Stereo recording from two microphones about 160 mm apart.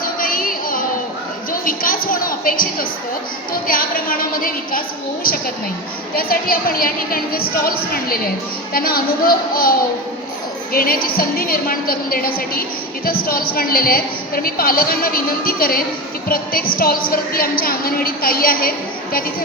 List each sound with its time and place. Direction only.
0.0 s music: 60° left (ahead or behind)
1.6 s a sound: 60° left (ahead or behind)
3.5 s a woman's voice: 65° left (ahead or behind)
6.1 s a woman's voice: 65° left (ahead or behind)